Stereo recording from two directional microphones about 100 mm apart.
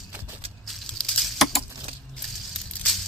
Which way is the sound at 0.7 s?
5° left (ahead or behind).